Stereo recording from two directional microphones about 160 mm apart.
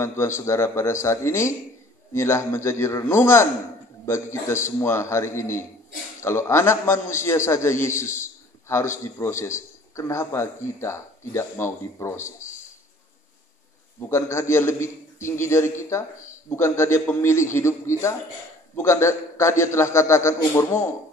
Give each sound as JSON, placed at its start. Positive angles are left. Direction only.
{"t": 0.0, "sound": "a man's voice", "side_deg": 15}
{"t": 14.0, "sound": "a man's voice", "side_deg": 15}